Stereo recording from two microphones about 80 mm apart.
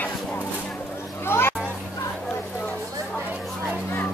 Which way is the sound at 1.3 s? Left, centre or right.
Left.